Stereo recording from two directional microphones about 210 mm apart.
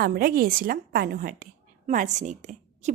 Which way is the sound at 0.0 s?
45° right (ahead or behind).